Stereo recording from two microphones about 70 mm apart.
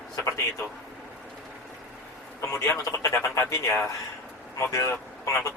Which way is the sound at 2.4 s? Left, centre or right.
Left.